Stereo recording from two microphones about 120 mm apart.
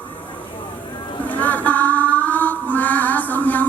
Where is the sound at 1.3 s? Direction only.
15° left (ahead or behind).